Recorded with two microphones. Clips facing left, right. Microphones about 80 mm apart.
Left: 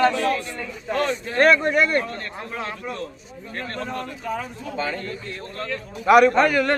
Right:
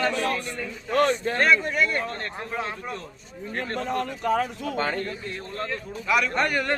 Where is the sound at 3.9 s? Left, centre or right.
Right.